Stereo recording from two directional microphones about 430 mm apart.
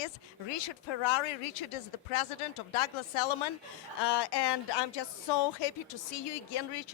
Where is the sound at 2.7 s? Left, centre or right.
Left.